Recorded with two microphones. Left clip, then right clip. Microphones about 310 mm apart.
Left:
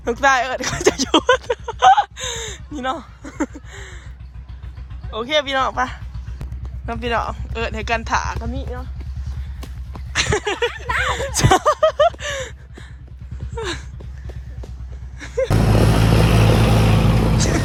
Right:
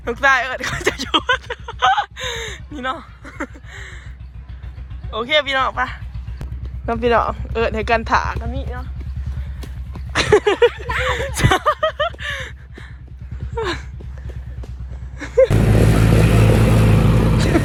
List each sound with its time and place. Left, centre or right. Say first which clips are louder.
0.0 s a sound: even; centre
5.1 s speech: right 2 dB; centre
6.4 s speech: right 6 dB; centre
9.6 s a sound: even; centre
13.6 s speech: right 4 dB; centre
15.2 s vehicle: right 8 dB; centre
15.5 s vehicle: even; left
17.3 s vehicle: right 3 dB; centre